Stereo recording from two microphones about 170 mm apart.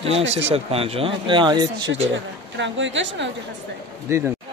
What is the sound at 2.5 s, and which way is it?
Speech, 90° right.